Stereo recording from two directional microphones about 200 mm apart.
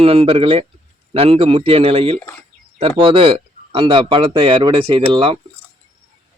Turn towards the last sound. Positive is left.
turn(degrees=-25)  # may be behind; listen again after turning